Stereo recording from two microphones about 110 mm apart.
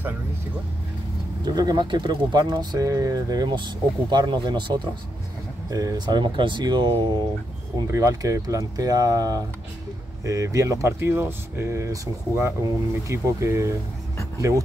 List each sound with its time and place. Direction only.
1.4 s speech: 35° right (ahead or behind)
5.7 s speech: 30° right (ahead or behind)
7.8 s speech: 30° right (ahead or behind)